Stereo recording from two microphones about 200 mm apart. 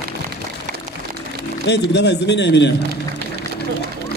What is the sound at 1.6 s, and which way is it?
A man's voice, 60° left (ahead or behind).